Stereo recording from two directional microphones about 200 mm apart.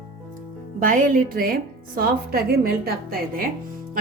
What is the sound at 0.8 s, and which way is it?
A woman's voice, 40° right (ahead or behind).